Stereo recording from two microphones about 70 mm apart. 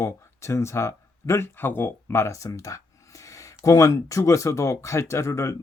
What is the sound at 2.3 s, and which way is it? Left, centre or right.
Speech, left.